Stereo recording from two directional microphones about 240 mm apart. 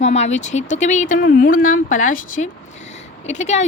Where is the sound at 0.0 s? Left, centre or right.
Left.